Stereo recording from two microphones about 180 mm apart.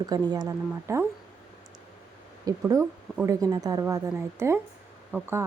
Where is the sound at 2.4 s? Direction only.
15° right (ahead or behind).